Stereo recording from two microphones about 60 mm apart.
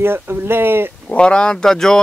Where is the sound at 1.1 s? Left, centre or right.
Centre.